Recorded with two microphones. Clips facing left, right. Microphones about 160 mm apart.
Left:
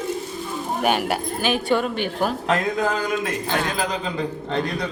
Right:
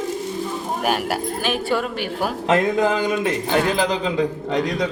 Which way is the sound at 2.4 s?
20° right (ahead or behind).